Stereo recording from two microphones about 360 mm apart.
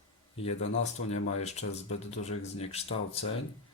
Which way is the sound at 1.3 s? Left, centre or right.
Centre.